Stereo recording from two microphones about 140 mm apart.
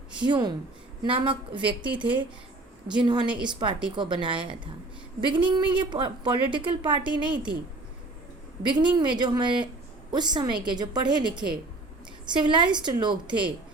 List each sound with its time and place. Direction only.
0.3 s a woman's voice: 30° right (ahead or behind)
2.9 s a woman's voice: 35° right (ahead or behind)
7.0 s a woman's voice: 10° right (ahead or behind)
8.7 s a woman's voice: 35° right (ahead or behind)